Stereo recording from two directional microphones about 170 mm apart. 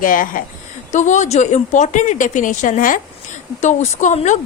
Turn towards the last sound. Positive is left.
turn(degrees=45)  # may be behind; listen again after turning